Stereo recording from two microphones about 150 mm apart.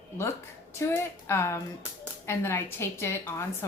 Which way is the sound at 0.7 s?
15° left (ahead or behind).